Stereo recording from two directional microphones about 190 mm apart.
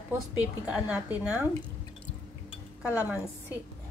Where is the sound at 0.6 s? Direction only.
5° right (ahead or behind).